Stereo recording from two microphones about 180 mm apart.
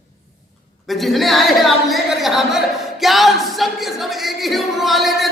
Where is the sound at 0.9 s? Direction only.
Centre (ahead or behind).